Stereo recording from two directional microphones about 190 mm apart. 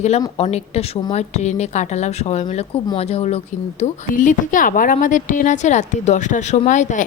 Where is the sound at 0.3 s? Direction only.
35° left (ahead or behind).